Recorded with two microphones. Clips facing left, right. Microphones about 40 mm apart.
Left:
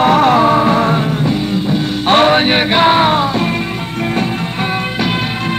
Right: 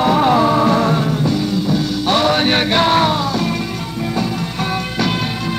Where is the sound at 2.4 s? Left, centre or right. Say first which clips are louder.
Left 3 dB; left.